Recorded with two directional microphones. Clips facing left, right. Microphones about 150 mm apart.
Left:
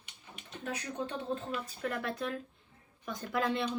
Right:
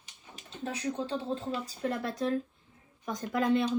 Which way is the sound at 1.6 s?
35° right (ahead or behind).